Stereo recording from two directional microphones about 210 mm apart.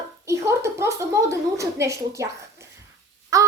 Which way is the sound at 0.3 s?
15° right (ahead or behind).